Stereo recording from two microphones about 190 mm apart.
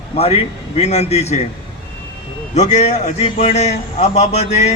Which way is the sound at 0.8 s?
35° left (ahead or behind).